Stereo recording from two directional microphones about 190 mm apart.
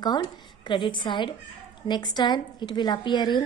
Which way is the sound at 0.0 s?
20° left (ahead or behind).